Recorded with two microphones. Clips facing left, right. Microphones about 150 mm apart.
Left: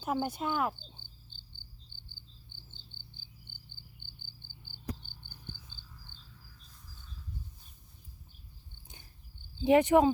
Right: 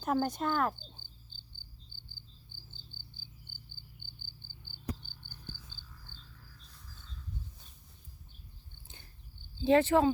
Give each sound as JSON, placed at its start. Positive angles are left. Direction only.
{"t": 0.0, "sound": "speech", "side_deg": 10}
{"t": 4.2, "sound": "cricket", "side_deg": 15}
{"t": 9.6, "sound": "speech", "side_deg": 15}